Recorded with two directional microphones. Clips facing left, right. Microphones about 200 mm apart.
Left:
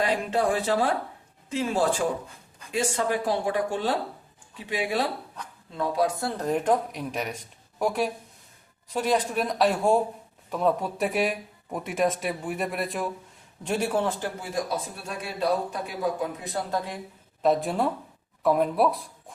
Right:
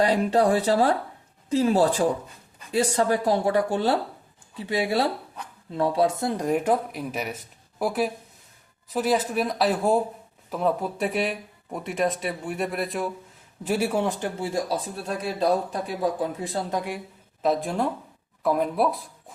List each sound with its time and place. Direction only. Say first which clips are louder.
0.0 s speech: right 4 dB; 35° right (ahead or behind); by 14.3 s 15° right (ahead or behind)
14.4 s speech: right 3 dB; 30° right (ahead or behind)
16.7 s speech: even; 10° right (ahead or behind)
17.4 s speech: left 1 dB; centre (ahead or behind)